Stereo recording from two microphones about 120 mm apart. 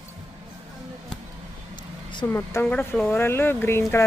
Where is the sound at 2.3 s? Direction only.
20° left (ahead or behind).